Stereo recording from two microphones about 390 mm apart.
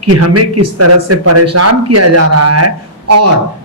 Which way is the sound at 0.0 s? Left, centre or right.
Right.